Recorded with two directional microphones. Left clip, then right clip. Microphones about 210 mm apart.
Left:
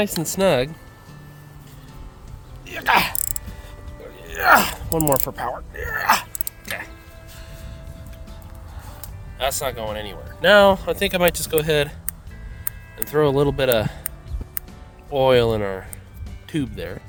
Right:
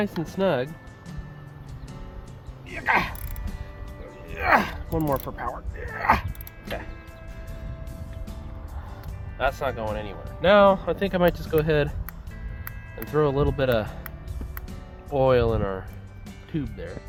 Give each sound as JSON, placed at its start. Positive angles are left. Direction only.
{"t": 0.2, "sound": "speech", "side_deg": 55}
{"t": 2.7, "sound": "speech", "side_deg": 50}
{"t": 4.4, "sound": "speech", "side_deg": 50}
{"t": 9.4, "sound": "speech", "side_deg": 70}
{"t": 13.1, "sound": "speech", "side_deg": 40}
{"t": 15.1, "sound": "speech", "side_deg": 40}